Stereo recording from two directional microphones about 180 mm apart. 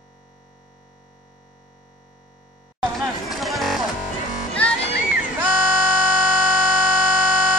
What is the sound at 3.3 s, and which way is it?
Music, centre (ahead or behind).